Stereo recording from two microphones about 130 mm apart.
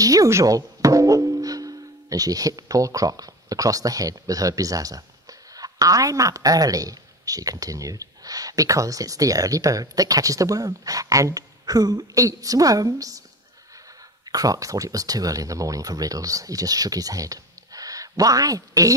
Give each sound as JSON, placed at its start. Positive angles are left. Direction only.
{"t": 0.0, "sound": "a woman's voice", "side_deg": -25}
{"t": 14.2, "sound": "a woman's voice", "side_deg": -30}